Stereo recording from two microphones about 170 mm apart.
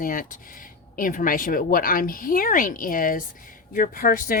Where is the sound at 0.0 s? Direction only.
55° left (ahead or behind).